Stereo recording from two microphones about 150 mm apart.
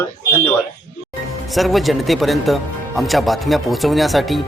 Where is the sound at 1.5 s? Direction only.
Centre (ahead or behind).